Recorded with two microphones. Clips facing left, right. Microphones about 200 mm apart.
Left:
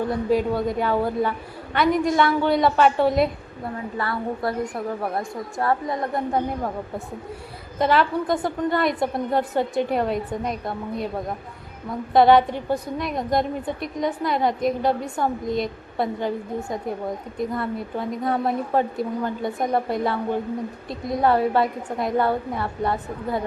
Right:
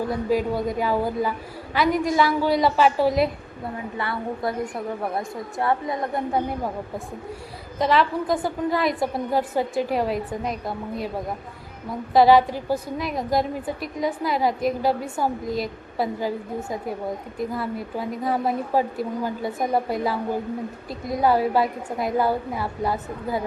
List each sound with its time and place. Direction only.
0.1 s a woman's voice: centre (ahead or behind)
3.9 s a woman's voice: 25° right (ahead or behind)
7.8 s a woman's voice: centre (ahead or behind)
12.1 s a woman's voice: centre (ahead or behind)